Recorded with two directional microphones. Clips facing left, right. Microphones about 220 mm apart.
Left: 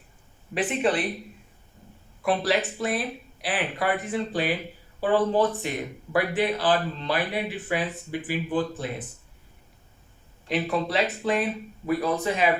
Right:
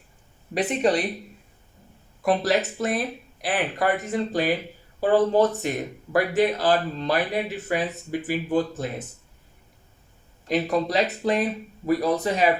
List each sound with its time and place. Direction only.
0.5 s speech: 40° right (ahead or behind)
2.2 s speech: 45° right (ahead or behind)
10.5 s speech: 40° right (ahead or behind)